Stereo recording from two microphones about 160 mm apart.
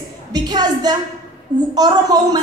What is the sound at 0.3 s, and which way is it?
A woman's voice, 25° right (ahead or behind).